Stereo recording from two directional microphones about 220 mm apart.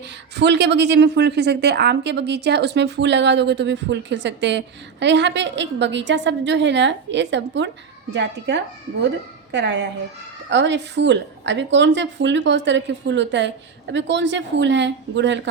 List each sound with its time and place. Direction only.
0.3 s a woman's voice: 50° right (ahead or behind)